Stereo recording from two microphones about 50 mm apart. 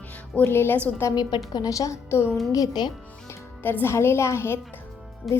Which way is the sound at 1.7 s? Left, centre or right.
Left.